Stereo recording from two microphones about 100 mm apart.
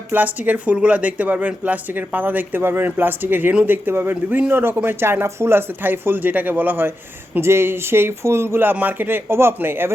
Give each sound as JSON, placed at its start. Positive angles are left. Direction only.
{"t": 0.1, "sound": "speech", "side_deg": -15}